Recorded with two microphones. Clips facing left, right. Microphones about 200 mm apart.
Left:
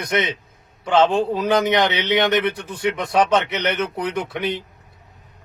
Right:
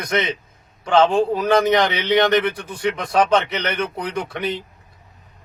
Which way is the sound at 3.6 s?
25° left (ahead or behind).